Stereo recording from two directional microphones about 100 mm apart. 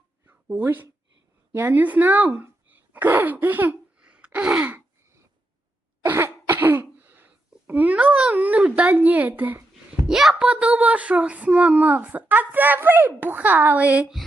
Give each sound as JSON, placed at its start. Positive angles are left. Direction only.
{"t": 0.3, "sound": "speech", "side_deg": -20}
{"t": 6.1, "sound": "throat clearing", "side_deg": -20}
{"t": 7.7, "sound": "speech", "side_deg": -15}
{"t": 10.1, "sound": "a child's voice", "side_deg": -5}